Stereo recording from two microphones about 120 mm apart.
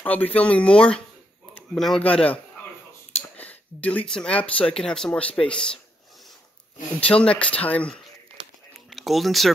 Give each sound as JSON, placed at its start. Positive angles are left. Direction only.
{"t": 0.0, "sound": "speech", "side_deg": 15}
{"t": 3.3, "sound": "a sound", "side_deg": 15}
{"t": 4.1, "sound": "speech", "side_deg": 10}
{"t": 7.0, "sound": "speech", "side_deg": 10}
{"t": 8.9, "sound": "speech", "side_deg": 0}